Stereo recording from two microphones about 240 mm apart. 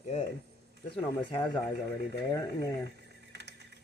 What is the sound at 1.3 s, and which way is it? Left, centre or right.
Speech, centre.